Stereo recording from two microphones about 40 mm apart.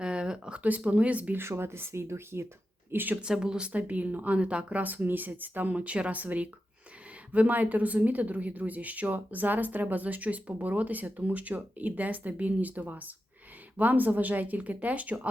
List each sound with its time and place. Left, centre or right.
0.0 s a sound: right
0.6 s speech: right
1.4 s speech: right
2.9 s speech: right
3.4 s speech: right
3.8 s speech: right
5.0 s speech: right
5.7 s speech: right